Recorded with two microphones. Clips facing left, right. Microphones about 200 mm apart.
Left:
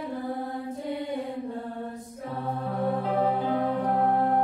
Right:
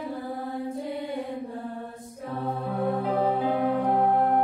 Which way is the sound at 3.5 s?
15° right (ahead or behind).